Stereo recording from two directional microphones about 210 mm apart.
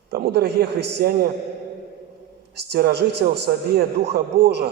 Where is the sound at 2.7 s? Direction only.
50° right (ahead or behind).